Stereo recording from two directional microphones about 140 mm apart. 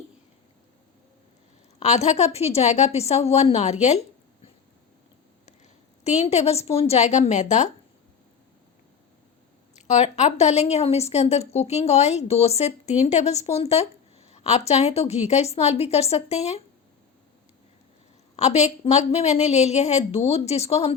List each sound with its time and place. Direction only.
1.8 s speech: 50° left (ahead or behind)
6.1 s speech: 50° left (ahead or behind)
9.7 s speech: 55° left (ahead or behind)
14.3 s a sound: 50° left (ahead or behind)
14.7 s speech: 50° left (ahead or behind)
18.3 s speech: 50° left (ahead or behind)